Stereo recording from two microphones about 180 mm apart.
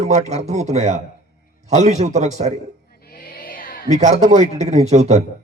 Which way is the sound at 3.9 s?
40° right (ahead or behind).